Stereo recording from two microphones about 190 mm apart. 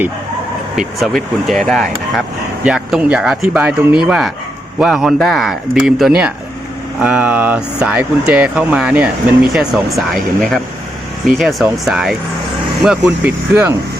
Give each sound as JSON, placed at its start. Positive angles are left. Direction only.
{"t": 0.8, "sound": "speech", "side_deg": 0}